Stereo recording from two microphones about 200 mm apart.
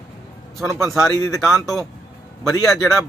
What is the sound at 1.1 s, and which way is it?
Speech, 15° left (ahead or behind).